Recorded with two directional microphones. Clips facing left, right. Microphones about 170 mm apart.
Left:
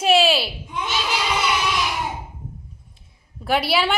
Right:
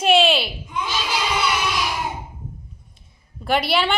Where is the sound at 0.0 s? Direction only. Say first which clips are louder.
Even; 5° left (ahead or behind).